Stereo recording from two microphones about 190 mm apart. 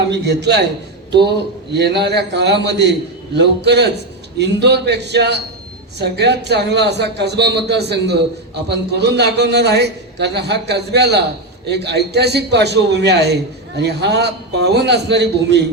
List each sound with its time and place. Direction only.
0.1 s a man's voice: 60° right (ahead or behind)
1.7 s a man's voice: 60° right (ahead or behind)